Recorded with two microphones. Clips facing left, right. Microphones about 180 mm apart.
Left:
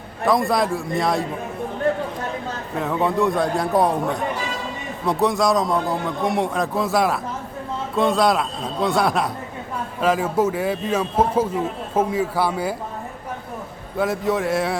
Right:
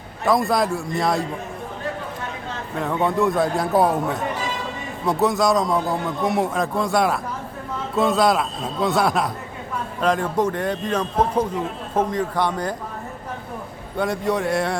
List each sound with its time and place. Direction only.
0.3 s a man's voice: centre (ahead or behind)
2.7 s a man's voice: centre (ahead or behind)
13.9 s a man's voice: centre (ahead or behind)